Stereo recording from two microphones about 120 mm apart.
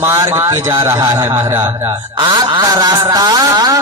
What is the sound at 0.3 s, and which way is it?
Speech, 25° right (ahead or behind).